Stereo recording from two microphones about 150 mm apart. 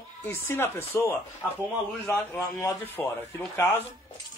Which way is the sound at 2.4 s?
20° left (ahead or behind).